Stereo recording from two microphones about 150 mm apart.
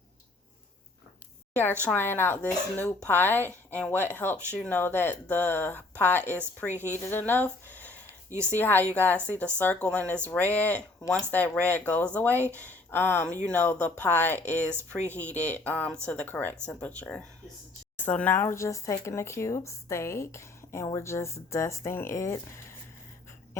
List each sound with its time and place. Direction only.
1.8 s speech: 10° left (ahead or behind)
8.3 s speech: 15° right (ahead or behind)
8.5 s speech: 15° left (ahead or behind)
12.4 s speech: 15° right (ahead or behind)
12.6 s speech: 15° left (ahead or behind)